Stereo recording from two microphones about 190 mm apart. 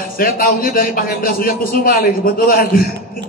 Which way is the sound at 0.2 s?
50° left (ahead or behind).